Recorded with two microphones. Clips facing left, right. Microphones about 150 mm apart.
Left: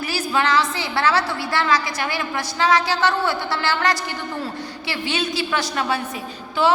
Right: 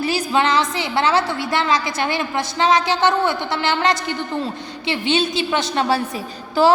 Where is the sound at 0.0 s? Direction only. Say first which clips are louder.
Right 3 dB; 20° right (ahead or behind).